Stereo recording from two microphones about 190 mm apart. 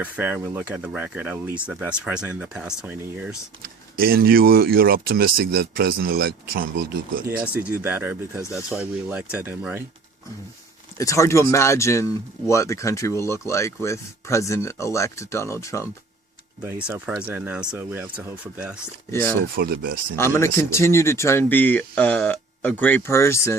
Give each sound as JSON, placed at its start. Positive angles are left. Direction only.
{"t": 0.0, "sound": "speech", "side_deg": -10}
{"t": 3.9, "sound": "speech", "side_deg": -50}
{"t": 7.3, "sound": "speech", "side_deg": -5}
{"t": 10.9, "sound": "speech", "side_deg": 15}
{"t": 16.6, "sound": "speech", "side_deg": -10}
{"t": 19.5, "sound": "speech", "side_deg": -50}
{"t": 20.1, "sound": "speech", "side_deg": 15}